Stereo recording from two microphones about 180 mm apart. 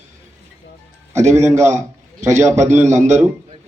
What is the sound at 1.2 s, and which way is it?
Speech, 40° right (ahead or behind).